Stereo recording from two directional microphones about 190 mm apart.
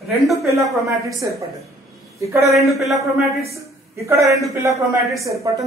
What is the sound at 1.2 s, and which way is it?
Speech, 20° right (ahead or behind).